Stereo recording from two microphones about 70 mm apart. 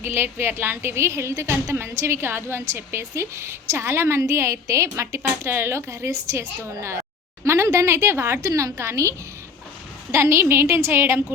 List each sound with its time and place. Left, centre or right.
0.0 s a woman's voice: right
8.4 s a woman's voice: right